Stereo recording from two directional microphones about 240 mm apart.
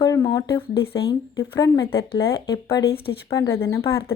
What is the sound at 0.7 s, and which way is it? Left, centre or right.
Speech, left.